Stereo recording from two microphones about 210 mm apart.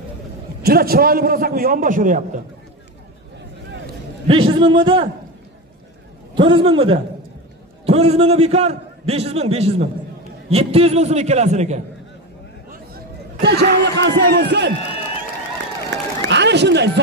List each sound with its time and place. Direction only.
0.6 s a man's voice: 45° right (ahead or behind)
4.3 s a man's voice: 25° right (ahead or behind)
6.3 s a man's voice: 25° right (ahead or behind)
12.7 s a man's voice: 50° right (ahead or behind)
15.9 s speech: 55° right (ahead or behind)